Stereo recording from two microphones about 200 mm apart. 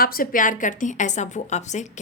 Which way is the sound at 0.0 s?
45° left (ahead or behind).